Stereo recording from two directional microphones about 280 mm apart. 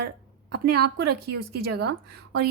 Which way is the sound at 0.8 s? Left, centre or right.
Right.